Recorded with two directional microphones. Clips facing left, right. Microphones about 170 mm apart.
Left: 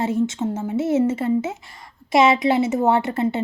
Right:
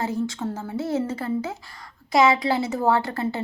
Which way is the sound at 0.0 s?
25° left (ahead or behind).